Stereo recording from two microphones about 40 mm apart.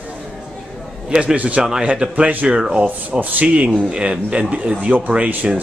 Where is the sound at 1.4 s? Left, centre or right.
Right.